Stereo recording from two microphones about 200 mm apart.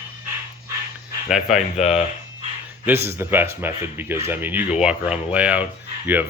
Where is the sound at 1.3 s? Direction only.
5° right (ahead or behind).